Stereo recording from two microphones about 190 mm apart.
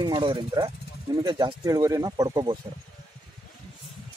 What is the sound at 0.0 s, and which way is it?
Speech, 20° right (ahead or behind).